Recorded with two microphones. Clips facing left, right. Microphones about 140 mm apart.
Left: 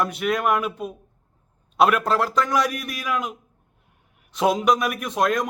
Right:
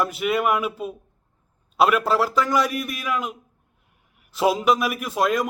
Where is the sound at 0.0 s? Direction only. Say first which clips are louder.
Right 1 dB; centre (ahead or behind).